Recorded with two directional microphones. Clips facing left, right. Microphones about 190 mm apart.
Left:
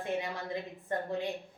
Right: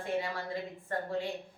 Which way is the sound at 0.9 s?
20° left (ahead or behind).